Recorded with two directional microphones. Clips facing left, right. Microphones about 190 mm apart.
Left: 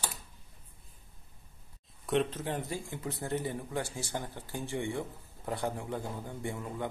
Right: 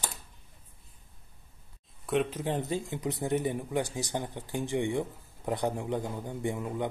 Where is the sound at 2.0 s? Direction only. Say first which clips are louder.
Right 1 dB; centre (ahead or behind).